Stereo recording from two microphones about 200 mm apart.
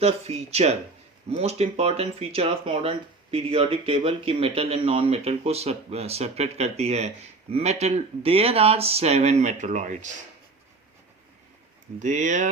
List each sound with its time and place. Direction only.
0.0 s speech: 30° right (ahead or behind)
11.9 s speech: 40° right (ahead or behind)